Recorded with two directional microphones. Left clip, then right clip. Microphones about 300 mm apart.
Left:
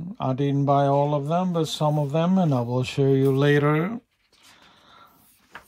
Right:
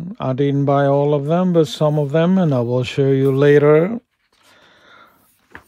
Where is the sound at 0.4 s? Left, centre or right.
Right.